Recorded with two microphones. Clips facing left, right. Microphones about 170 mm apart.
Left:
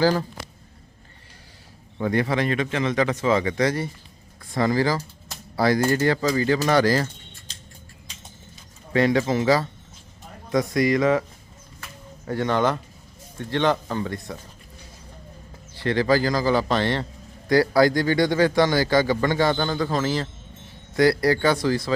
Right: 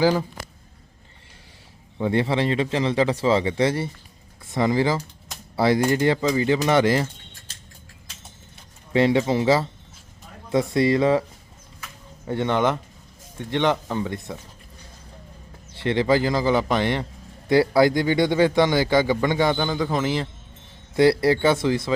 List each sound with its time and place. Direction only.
0.0 s speech: 15° right (ahead or behind)
2.0 s speech: 25° right (ahead or behind)
8.9 s speech: 25° right (ahead or behind)
12.3 s speech: 20° right (ahead or behind)
15.8 s speech: 25° right (ahead or behind)
19.5 s a man's voice: 5° right (ahead or behind)
19.8 s speech: 20° right (ahead or behind)